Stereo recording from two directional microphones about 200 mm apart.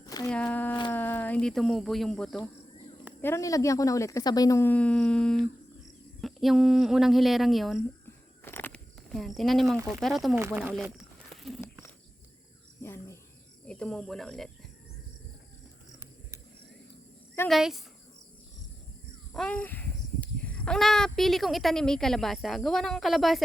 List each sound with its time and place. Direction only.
0.0 s a sound: 20° left (ahead or behind)
0.3 s speech: 5° left (ahead or behind)
0.7 s a sound: 25° left (ahead or behind)
0.9 s speech: 10° left (ahead or behind)
8.4 s a sound: 10° left (ahead or behind)
9.9 s speech: centre (ahead or behind)
12.8 s bird: 10° left (ahead or behind)
13.7 s speech: 5° left (ahead or behind)
17.5 s speech: centre (ahead or behind)
19.3 s speech: 5° left (ahead or behind)